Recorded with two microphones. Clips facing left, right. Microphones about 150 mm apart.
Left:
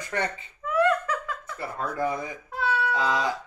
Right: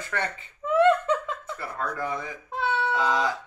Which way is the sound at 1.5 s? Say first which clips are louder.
Left 4 dB; 20° left (ahead or behind).